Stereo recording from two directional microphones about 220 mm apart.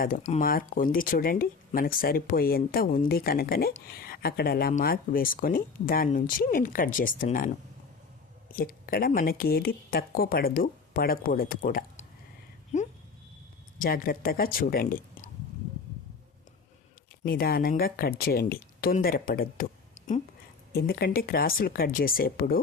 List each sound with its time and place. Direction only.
0.0 s speech: 35° left (ahead or behind)
12.7 s a sound: 35° left (ahead or behind)
13.7 s speech: 40° left (ahead or behind)
17.2 s speech: 45° left (ahead or behind)
20.7 s speech: 45° left (ahead or behind)